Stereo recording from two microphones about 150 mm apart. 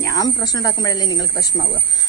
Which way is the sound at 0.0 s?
25° left (ahead or behind).